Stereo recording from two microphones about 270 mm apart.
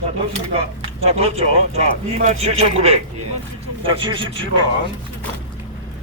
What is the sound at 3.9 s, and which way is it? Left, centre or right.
Speech, centre.